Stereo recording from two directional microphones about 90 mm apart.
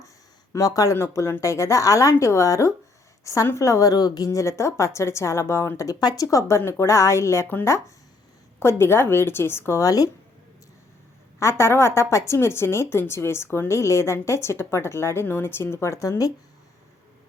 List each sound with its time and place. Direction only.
0.5 s a woman's voice: 40° left (ahead or behind)
11.3 s a woman's voice: 30° left (ahead or behind)